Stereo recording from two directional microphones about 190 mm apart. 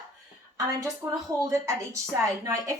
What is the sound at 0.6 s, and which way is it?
A woman's voice, 15° right (ahead or behind).